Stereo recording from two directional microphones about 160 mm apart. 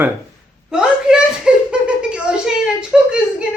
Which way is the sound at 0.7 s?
5° right (ahead or behind).